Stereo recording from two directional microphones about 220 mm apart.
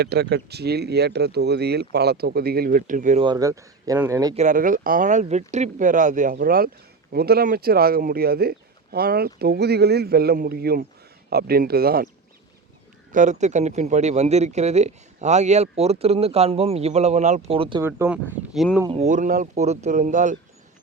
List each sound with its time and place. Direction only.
0.0 s speech: 45° right (ahead or behind)
3.2 s speech: 15° right (ahead or behind)
4.4 s speech: 35° right (ahead or behind)
13.1 s speech: 35° right (ahead or behind)
17.8 s speech: 10° right (ahead or behind)
18.9 s speech: 30° right (ahead or behind)